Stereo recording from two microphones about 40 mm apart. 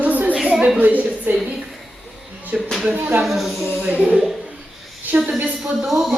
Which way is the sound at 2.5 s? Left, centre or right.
Right.